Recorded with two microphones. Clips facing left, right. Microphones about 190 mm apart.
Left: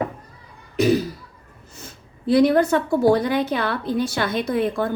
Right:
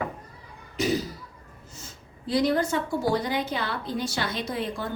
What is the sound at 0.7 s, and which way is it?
A woman's voice, 60° left (ahead or behind).